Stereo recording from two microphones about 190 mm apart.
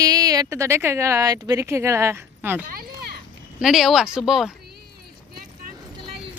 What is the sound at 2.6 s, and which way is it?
Speech, 50° right (ahead or behind).